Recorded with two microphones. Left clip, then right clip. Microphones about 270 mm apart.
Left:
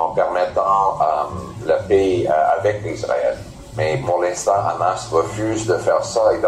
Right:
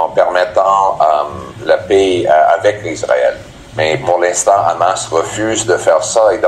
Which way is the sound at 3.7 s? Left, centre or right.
Right.